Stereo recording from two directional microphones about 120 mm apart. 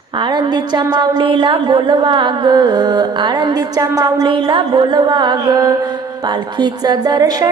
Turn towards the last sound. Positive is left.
turn(degrees=-35)  # may be behind; listen again after turning